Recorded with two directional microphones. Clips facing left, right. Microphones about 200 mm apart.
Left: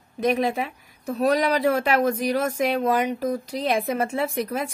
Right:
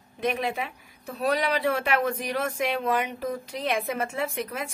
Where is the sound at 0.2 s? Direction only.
40° left (ahead or behind).